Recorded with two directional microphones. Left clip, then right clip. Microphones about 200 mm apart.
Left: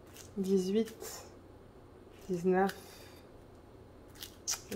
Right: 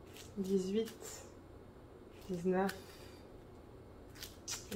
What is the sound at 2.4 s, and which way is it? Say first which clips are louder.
Speech: left 5 dB; 55° left (ahead or behind).